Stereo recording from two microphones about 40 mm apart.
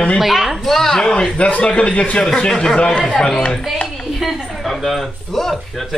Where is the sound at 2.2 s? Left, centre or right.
Centre.